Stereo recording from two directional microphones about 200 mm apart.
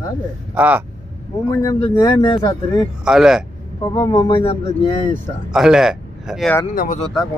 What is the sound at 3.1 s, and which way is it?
Speech, centre (ahead or behind).